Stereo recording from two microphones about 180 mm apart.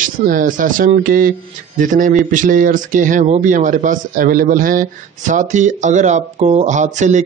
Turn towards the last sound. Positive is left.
turn(degrees=-40)  # may be behind; listen again after turning